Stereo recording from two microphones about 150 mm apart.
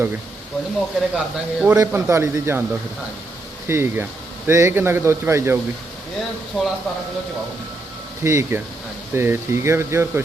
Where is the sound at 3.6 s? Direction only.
15° right (ahead or behind).